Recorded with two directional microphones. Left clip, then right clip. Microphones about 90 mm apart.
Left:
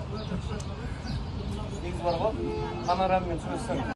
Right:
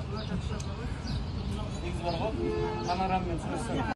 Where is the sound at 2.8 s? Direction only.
Centre (ahead or behind).